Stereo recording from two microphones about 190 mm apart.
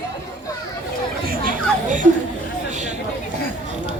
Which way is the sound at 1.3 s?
45° right (ahead or behind).